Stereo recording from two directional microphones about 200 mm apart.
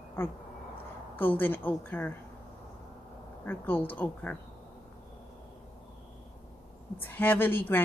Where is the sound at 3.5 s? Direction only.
10° left (ahead or behind).